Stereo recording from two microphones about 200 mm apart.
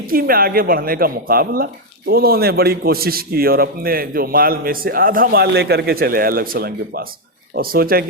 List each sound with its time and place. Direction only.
0.1 s speech: 45° right (ahead or behind)